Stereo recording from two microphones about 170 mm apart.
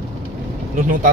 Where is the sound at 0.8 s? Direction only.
50° right (ahead or behind).